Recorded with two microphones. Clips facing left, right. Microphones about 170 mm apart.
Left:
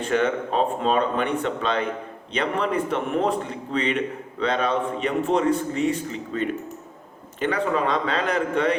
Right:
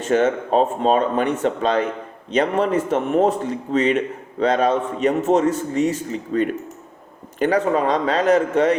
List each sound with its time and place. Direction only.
0.1 s a man's voice: 40° right (ahead or behind)